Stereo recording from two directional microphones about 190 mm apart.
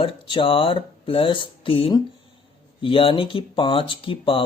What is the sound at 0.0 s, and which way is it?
Speech, 25° left (ahead or behind).